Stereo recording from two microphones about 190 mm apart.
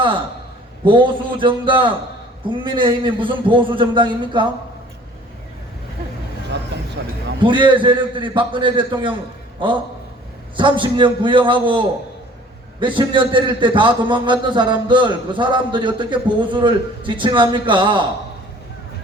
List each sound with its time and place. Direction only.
0.9 s a man's voice: 25° right (ahead or behind)
7.0 s speech: 75° right (ahead or behind)
7.3 s a man's voice: 25° right (ahead or behind)